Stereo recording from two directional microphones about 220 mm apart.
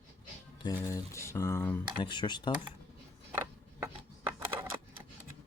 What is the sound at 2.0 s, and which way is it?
Speech, 20° left (ahead or behind).